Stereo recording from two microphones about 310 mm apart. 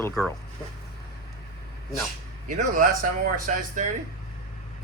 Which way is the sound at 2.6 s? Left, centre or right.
Right.